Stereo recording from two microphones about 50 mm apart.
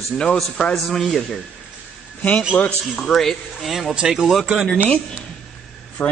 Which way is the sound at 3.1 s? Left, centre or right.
Centre.